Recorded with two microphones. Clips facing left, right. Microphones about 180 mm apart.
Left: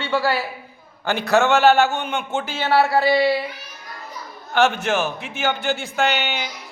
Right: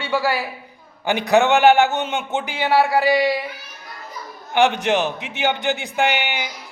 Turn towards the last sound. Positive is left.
turn(degrees=-15)  # may be behind; listen again after turning